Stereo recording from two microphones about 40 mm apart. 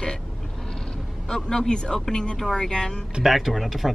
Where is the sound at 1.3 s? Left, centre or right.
Centre.